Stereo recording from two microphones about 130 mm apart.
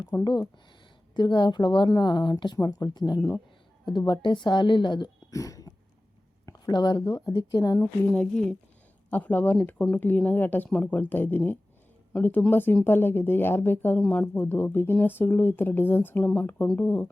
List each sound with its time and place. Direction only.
0.1 s speech: 30° left (ahead or behind)
8.1 s speech: 5° left (ahead or behind)